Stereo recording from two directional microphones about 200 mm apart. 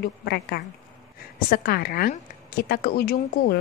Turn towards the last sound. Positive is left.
turn(degrees=50)  # may be behind; listen again after turning